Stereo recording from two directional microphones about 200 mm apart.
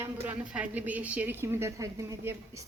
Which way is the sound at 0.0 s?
5° right (ahead or behind).